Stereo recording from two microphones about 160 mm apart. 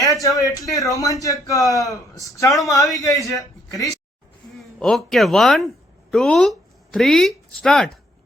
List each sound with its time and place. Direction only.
0.0 s a sound: 20° left (ahead or behind)
0.7 s a man's voice: 20° left (ahead or behind)
4.8 s speech: centre (ahead or behind)